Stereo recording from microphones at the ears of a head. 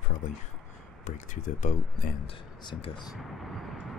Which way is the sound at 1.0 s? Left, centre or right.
Left.